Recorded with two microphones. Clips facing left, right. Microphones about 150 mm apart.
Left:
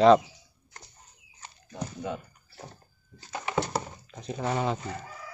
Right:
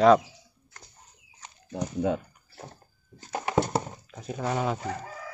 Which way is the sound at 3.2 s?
55° right (ahead or behind).